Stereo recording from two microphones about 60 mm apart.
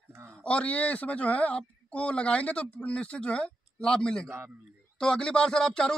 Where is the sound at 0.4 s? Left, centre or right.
Centre.